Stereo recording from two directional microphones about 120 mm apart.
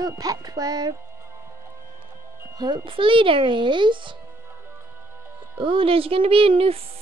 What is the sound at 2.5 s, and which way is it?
Speech, 40° right (ahead or behind).